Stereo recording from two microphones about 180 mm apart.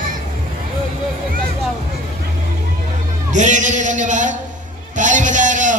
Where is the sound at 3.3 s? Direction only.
45° right (ahead or behind).